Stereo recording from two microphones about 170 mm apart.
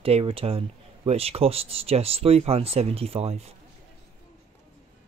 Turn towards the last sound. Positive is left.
turn(degrees=-35)  # may be behind; listen again after turning